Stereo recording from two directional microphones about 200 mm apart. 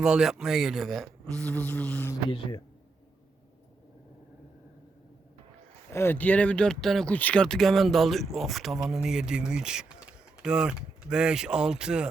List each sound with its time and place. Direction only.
0.0 s speech: 5° right (ahead or behind)
1.4 s a sound: 5° left (ahead or behind)
5.9 s speech: 10° left (ahead or behind); by 12.0 s 5° right (ahead or behind)